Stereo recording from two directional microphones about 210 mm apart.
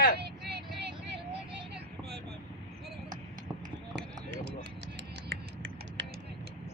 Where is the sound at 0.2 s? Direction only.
50° right (ahead or behind).